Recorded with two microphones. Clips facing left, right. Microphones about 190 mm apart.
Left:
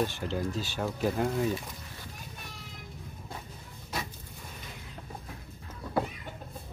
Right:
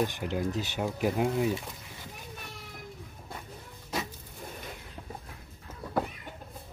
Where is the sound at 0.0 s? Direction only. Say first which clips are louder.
Right 1 dB; 15° right (ahead or behind).